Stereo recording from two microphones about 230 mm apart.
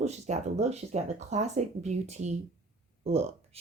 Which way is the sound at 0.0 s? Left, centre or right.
Right.